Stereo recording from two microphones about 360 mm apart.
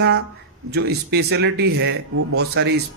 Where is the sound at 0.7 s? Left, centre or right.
Right.